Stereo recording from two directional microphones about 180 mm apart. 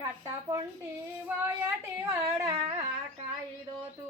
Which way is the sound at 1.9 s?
15° right (ahead or behind).